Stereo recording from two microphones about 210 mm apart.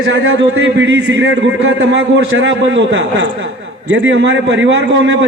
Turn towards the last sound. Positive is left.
turn(degrees=-60)  # may be behind; listen again after turning